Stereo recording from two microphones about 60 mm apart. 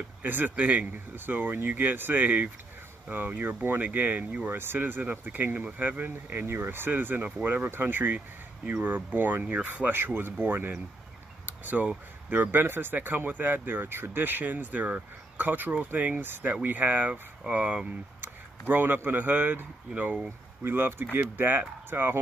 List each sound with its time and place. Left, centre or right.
0.2 s speech: right
4.5 s speech: right
9.8 s speech: right
11.4 s a sound: right
12.3 s speech: right
18.2 s speech: right